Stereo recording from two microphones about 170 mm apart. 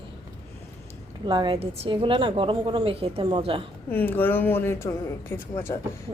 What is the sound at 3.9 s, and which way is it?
Speech, 10° left (ahead or behind).